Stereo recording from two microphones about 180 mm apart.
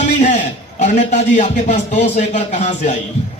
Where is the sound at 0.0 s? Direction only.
45° left (ahead or behind).